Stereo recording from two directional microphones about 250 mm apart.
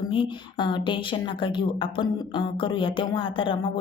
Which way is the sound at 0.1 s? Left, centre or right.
Centre.